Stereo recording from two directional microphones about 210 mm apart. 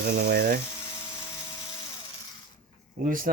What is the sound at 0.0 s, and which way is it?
Speech, 50° right (ahead or behind).